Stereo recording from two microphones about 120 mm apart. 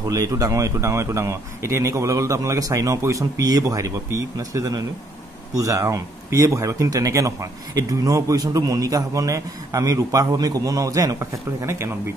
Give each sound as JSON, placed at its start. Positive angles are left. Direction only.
{"t": 0.1, "sound": "speech", "side_deg": -25}